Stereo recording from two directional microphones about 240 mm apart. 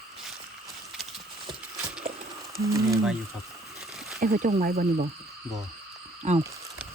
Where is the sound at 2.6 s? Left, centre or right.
Centre.